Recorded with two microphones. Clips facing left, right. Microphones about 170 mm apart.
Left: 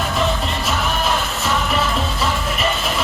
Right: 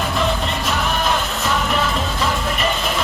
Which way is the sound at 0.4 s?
5° left (ahead or behind).